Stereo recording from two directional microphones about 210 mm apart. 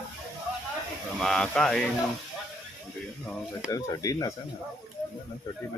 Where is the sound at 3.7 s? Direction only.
15° left (ahead or behind).